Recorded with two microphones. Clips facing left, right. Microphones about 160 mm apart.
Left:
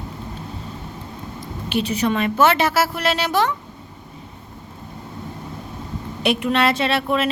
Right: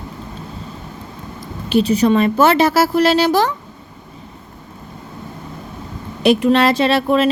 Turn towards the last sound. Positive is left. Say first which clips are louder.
# right 6 dB
turn(degrees=-35)  # may be behind; listen again after turning